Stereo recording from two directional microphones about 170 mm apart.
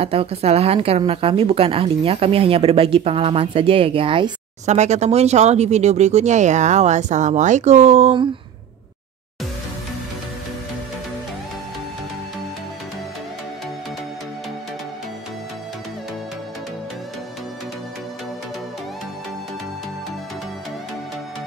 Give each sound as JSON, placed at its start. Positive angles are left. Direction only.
{"t": 0.0, "sound": "a woman's voice", "side_deg": -35}
{"t": 4.6, "sound": "a woman's voice", "side_deg": -40}